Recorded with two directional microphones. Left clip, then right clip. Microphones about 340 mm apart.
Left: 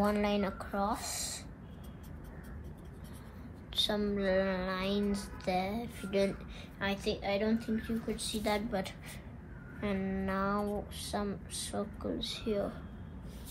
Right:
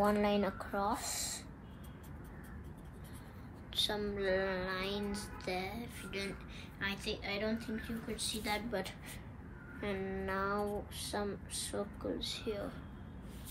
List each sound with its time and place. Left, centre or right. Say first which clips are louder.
0.2 s a sound: even; centre
3.7 s music: left 3 dB; centre
6.8 s a woman's voice: left 5 dB; centre
9.8 s music: left 2 dB; centre